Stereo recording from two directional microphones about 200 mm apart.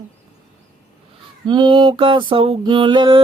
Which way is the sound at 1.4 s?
20° right (ahead or behind).